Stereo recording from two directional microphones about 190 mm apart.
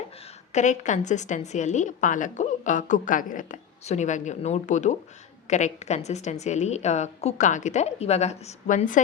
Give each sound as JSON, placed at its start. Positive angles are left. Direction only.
{"t": 0.5, "sound": "a woman's voice", "side_deg": 40}